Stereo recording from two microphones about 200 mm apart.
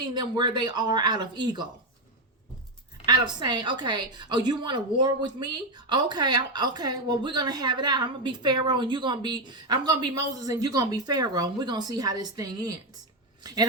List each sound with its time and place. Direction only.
0.0 s a woman's voice: 20° right (ahead or behind)
3.1 s a woman's voice: 20° right (ahead or behind)